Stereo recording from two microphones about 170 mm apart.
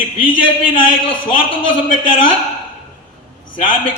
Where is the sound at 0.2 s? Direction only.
30° left (ahead or behind).